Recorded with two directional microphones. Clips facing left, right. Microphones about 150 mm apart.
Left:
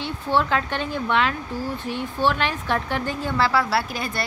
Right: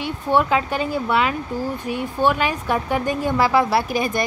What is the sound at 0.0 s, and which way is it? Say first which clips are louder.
Speech: right 3 dB; 10° right (ahead or behind).